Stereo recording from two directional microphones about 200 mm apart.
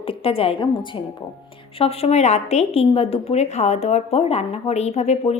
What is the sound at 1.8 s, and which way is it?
A woman's voice, 30° left (ahead or behind).